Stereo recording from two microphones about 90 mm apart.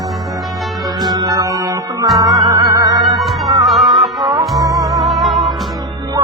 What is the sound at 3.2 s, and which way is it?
Music, centre (ahead or behind).